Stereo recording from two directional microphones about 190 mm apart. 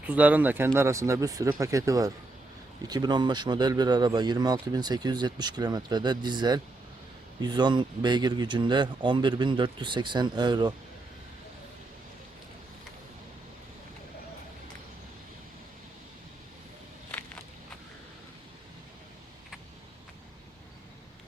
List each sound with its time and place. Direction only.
0.0 s speech: 10° right (ahead or behind)